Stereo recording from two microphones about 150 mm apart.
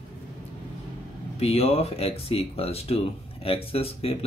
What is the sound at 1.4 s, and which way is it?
Speech, 40° left (ahead or behind).